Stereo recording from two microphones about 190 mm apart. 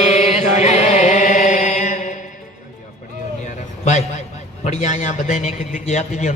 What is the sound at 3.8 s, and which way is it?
A man's voice, 40° left (ahead or behind).